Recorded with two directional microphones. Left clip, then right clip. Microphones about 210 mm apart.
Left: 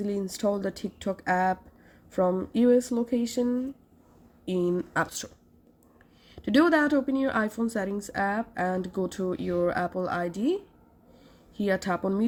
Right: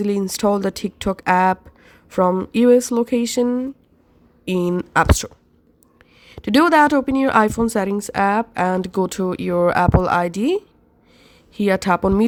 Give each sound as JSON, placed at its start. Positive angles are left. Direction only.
{"t": 0.0, "sound": "a woman's voice", "side_deg": -45}